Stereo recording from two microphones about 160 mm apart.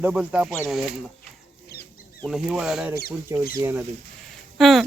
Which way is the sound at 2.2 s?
5° right (ahead or behind).